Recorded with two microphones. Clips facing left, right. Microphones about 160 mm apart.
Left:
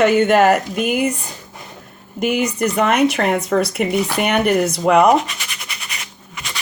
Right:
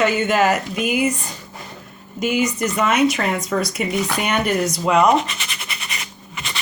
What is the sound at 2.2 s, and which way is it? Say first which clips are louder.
Speech: left 2 dB; 60° left (ahead or behind).